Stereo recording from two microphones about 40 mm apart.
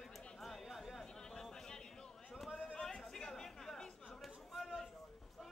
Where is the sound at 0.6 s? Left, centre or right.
Centre.